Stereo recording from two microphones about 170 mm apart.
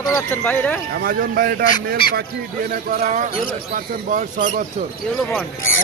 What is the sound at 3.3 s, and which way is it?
Speech, 55° left (ahead or behind).